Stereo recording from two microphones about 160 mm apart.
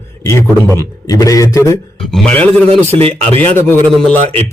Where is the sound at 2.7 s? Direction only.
40° right (ahead or behind).